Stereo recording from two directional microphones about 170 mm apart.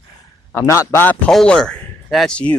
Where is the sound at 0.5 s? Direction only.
15° left (ahead or behind).